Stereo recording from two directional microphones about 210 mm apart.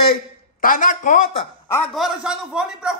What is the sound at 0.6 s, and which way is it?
Speech, 40° left (ahead or behind).